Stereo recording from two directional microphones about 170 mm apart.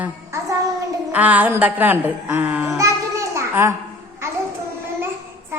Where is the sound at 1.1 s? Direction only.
10° right (ahead or behind).